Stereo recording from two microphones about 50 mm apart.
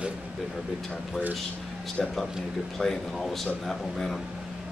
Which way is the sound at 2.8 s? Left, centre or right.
Centre.